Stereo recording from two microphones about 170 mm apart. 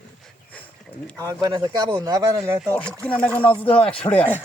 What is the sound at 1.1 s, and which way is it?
Speech, 20° right (ahead or behind).